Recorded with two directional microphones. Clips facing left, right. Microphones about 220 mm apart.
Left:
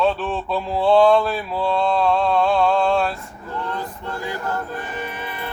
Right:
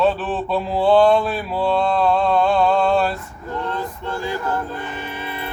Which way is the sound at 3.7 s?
25° right (ahead or behind).